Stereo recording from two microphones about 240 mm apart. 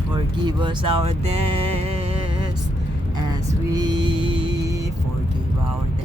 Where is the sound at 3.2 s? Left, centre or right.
Centre.